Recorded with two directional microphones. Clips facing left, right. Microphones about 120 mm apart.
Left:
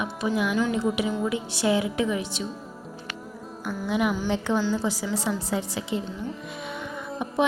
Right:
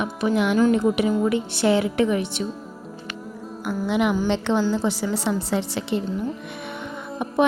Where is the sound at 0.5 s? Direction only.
45° right (ahead or behind).